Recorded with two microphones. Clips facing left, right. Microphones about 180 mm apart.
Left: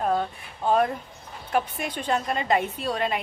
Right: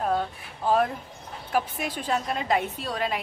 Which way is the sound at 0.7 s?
Centre (ahead or behind).